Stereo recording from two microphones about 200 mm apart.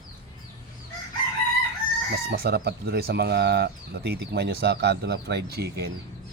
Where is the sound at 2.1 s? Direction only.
55° right (ahead or behind).